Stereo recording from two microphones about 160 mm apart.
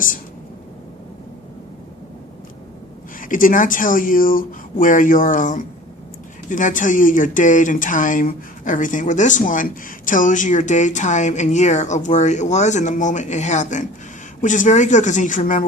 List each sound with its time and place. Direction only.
3.2 s speech: 55° left (ahead or behind)